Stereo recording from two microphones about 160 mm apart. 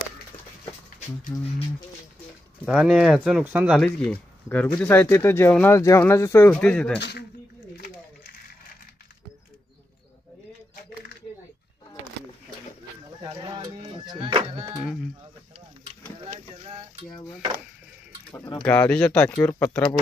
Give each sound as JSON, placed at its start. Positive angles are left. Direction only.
{"t": 2.6, "sound": "speech", "side_deg": 0}
{"t": 3.7, "sound": "speech", "side_deg": 5}
{"t": 7.0, "sound": "speech", "side_deg": 90}
{"t": 13.2, "sound": "a sound", "side_deg": -25}
{"t": 16.3, "sound": "a sound", "side_deg": -40}
{"t": 18.6, "sound": "speech", "side_deg": 10}